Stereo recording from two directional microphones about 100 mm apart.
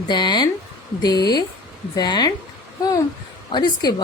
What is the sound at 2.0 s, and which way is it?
Speech, 45° left (ahead or behind).